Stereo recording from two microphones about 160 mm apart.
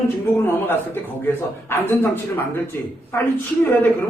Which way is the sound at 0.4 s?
15° left (ahead or behind).